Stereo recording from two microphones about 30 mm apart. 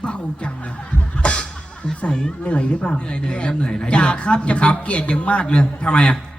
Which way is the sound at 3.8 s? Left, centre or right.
Left.